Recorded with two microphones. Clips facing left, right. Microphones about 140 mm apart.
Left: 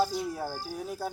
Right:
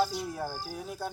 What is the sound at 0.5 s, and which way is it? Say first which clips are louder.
Speech: left 2 dB; 10° right (ahead or behind).